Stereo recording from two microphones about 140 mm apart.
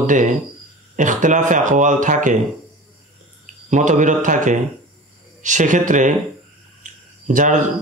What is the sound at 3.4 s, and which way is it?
Speech, 60° right (ahead or behind).